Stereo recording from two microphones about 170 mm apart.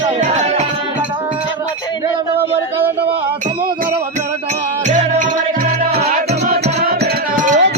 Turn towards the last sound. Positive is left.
turn(degrees=-50)  # may be behind; listen again after turning